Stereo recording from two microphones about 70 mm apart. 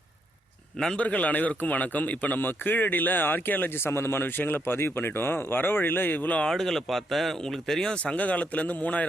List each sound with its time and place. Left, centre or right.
0.9 s speech: left
6.5 s speech: centre; by 9.0 s left